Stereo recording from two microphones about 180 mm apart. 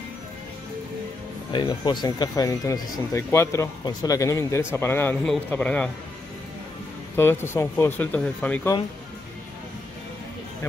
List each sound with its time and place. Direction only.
1.5 s speech: 25° left (ahead or behind); by 5.9 s 5° left (ahead or behind)
7.2 s speech: 15° left (ahead or behind)